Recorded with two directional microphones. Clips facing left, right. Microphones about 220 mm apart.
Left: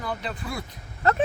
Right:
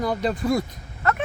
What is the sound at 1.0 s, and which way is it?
Speech, 30° left (ahead or behind).